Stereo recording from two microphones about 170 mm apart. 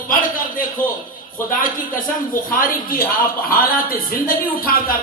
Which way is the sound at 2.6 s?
55° left (ahead or behind).